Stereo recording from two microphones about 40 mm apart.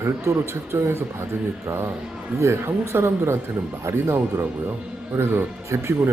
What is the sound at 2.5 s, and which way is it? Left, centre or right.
Speech, right.